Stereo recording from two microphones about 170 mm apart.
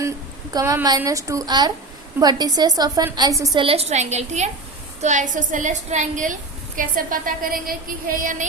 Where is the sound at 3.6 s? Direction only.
35° right (ahead or behind).